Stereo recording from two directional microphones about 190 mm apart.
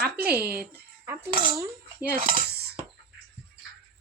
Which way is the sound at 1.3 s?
25° right (ahead or behind).